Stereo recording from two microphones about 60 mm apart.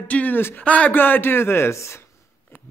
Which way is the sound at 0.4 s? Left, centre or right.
Left.